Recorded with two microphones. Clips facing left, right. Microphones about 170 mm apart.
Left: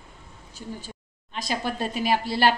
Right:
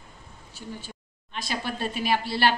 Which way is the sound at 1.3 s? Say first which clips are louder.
Left 3 dB; 40° left (ahead or behind).